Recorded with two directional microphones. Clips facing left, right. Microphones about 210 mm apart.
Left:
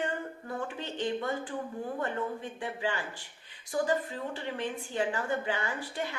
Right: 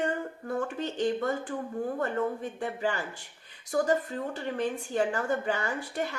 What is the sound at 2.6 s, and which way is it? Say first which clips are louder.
Speech: right 3 dB; 40° right (ahead or behind).